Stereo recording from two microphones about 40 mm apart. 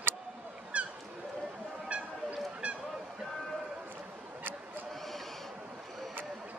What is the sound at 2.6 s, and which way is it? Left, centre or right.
Goose, right.